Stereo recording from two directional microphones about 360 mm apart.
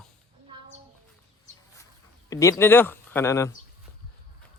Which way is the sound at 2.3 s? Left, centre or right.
Centre.